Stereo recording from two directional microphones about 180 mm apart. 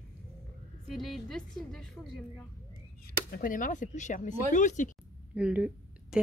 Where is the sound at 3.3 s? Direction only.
50° left (ahead or behind).